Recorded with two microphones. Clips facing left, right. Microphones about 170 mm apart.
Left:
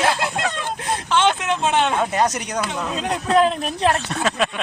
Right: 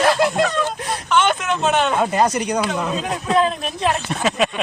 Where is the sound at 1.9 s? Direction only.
Centre (ahead or behind).